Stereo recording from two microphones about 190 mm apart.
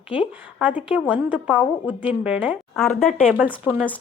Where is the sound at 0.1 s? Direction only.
25° left (ahead or behind).